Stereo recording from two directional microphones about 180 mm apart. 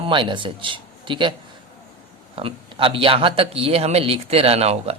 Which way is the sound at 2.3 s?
30° right (ahead or behind).